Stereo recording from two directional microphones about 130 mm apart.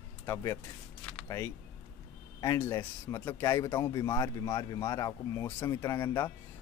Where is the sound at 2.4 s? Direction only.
20° left (ahead or behind).